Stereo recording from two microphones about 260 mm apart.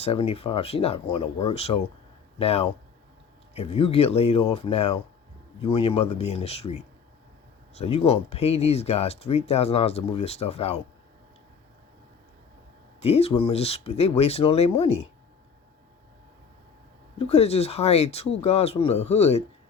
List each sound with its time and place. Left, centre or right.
0.0 s speech: left
7.8 s speech: left
13.0 s speech: left
17.2 s speech: left